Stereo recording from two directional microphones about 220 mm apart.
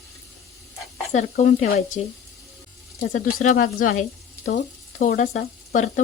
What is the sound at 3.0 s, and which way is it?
Speech, 40° left (ahead or behind).